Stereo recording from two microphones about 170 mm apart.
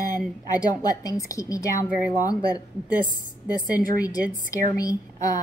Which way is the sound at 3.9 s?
20° left (ahead or behind).